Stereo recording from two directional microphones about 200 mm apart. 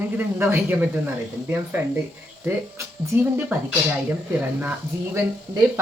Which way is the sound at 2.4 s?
10° right (ahead or behind).